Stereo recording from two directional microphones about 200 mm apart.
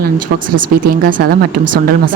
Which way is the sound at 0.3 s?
75° right (ahead or behind).